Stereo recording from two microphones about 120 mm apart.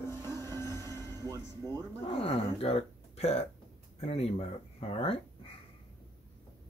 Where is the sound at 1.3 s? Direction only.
30° right (ahead or behind).